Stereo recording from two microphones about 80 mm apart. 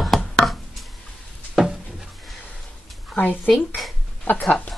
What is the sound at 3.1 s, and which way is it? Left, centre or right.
Speech, left.